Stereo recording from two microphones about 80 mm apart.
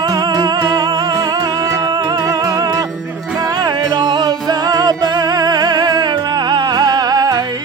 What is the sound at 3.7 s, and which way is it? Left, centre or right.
Music, right.